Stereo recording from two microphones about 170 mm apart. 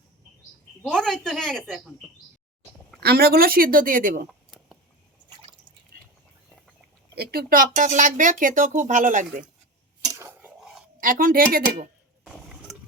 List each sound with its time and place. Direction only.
0.8 s a woman's voice: 5° left (ahead or behind)
3.0 s speech: 65° right (ahead or behind)
4.3 s a sound: centre (ahead or behind)
7.2 s speech: 65° right (ahead or behind); by 9.2 s 50° right (ahead or behind)
10.0 s cutlery: 15° right (ahead or behind)
11.0 s speech: 55° right (ahead or behind)